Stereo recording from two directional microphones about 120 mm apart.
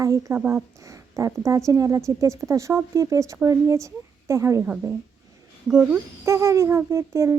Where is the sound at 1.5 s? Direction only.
25° right (ahead or behind).